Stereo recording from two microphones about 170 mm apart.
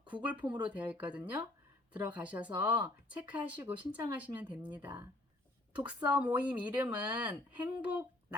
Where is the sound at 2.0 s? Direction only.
10° right (ahead or behind).